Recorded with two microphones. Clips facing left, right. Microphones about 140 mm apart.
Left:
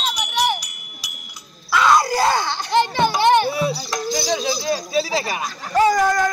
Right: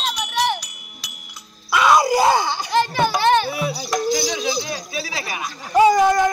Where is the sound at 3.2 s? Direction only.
15° left (ahead or behind).